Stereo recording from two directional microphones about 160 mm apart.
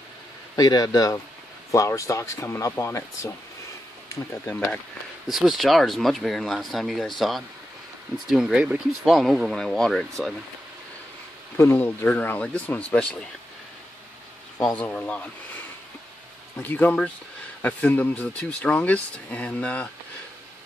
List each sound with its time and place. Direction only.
0.6 s speech: 25° left (ahead or behind)
5.3 s speech: centre (ahead or behind)
11.5 s speech: 15° left (ahead or behind)
14.8 s speech: 5° left (ahead or behind)
16.5 s speech: 10° left (ahead or behind)